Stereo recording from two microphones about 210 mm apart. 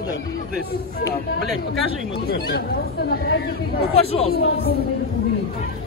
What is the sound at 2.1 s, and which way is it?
Speech, 50° left (ahead or behind).